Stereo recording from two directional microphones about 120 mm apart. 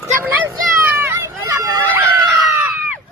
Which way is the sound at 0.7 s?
20° right (ahead or behind).